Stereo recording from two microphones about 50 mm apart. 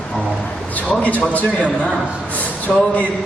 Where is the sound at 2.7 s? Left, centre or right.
Centre.